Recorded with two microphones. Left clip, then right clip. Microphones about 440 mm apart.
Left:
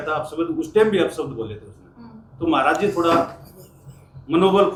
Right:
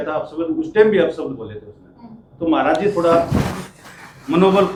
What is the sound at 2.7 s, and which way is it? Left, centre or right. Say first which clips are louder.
Speech: right 3 dB; right.